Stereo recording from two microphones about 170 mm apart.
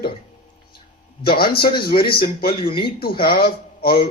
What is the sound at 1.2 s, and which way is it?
Speech, 65° left (ahead or behind).